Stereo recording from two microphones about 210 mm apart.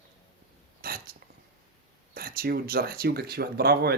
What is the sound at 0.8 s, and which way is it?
Speech, 45° right (ahead or behind).